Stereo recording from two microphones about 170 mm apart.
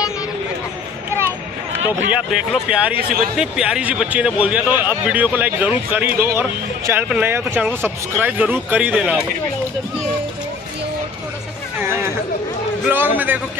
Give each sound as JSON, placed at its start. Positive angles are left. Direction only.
{"t": 2.0, "sound": "a man's voice", "side_deg": -5}
{"t": 3.0, "sound": "speech", "side_deg": -60}
{"t": 3.3, "sound": "a man's voice", "side_deg": -5}
{"t": 12.8, "sound": "a man's voice", "side_deg": -10}